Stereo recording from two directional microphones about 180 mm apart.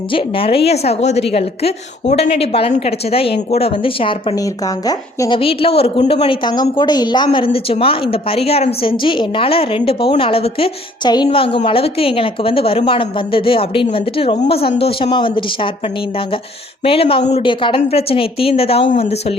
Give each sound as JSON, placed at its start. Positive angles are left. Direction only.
{"t": 0.1, "sound": "a woman's voice", "side_deg": 30}
{"t": 16.8, "sound": "a woman's voice", "side_deg": 30}